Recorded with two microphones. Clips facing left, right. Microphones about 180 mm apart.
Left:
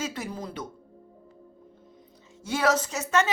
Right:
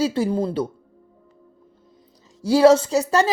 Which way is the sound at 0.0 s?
30° right (ahead or behind).